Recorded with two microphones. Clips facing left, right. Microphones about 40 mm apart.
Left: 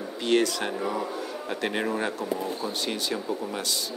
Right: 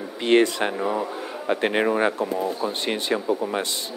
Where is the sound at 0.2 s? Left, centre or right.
Right.